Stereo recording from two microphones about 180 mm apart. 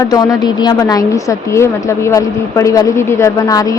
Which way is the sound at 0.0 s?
20° left (ahead or behind).